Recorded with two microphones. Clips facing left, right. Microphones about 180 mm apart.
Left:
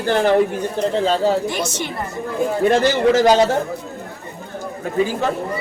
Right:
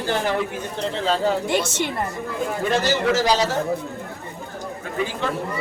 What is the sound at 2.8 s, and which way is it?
Speech, 50° left (ahead or behind).